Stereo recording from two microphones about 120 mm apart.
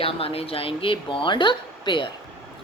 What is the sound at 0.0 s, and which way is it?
Speech, 50° left (ahead or behind).